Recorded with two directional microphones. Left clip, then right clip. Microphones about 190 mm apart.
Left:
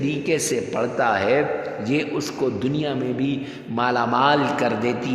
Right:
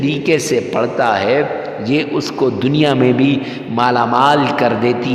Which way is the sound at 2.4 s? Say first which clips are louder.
Right 10 dB; 40° right (ahead or behind).